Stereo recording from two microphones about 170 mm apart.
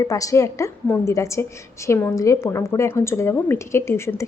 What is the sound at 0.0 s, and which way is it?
A woman's voice, 20° left (ahead or behind).